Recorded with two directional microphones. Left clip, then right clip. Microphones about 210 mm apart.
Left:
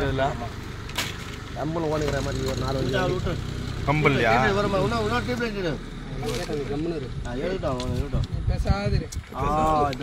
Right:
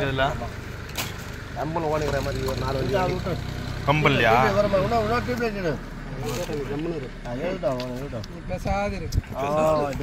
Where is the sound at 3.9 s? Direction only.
Centre (ahead or behind).